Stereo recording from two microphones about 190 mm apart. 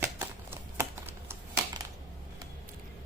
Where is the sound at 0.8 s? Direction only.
10° right (ahead or behind).